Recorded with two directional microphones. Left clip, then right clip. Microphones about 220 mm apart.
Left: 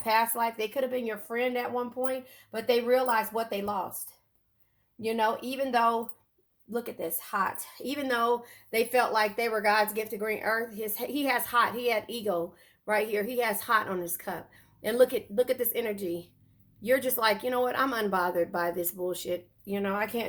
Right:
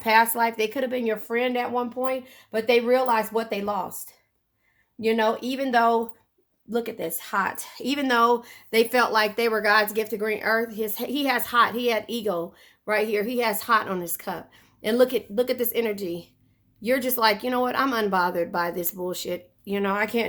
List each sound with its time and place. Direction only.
0.0 s speech: 40° right (ahead or behind)
5.0 s speech: 40° right (ahead or behind)